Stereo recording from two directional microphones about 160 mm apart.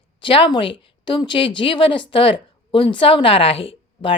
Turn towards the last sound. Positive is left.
turn(degrees=35)  # may be behind; listen again after turning